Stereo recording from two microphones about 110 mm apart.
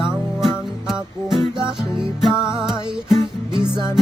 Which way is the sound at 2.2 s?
5° right (ahead or behind).